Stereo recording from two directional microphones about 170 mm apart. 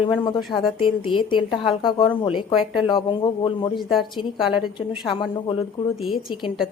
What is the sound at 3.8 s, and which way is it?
Speech, centre (ahead or behind).